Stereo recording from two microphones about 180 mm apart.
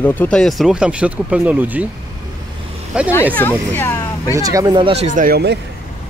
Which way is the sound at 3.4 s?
10° left (ahead or behind).